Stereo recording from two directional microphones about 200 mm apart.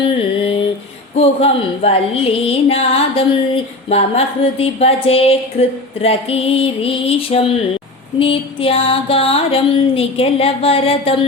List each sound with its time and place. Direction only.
1.1 s music: 30° left (ahead or behind)